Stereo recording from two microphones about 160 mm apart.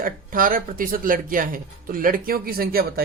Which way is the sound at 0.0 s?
55° right (ahead or behind).